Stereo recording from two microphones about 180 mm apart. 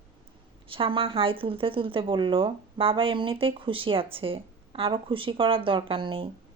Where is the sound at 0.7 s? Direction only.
30° right (ahead or behind).